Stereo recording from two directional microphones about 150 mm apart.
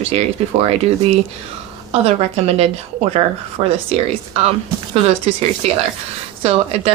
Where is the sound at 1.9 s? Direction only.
45° right (ahead or behind).